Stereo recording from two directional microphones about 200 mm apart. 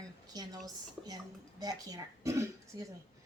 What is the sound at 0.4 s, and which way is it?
A woman's voice, 20° right (ahead or behind).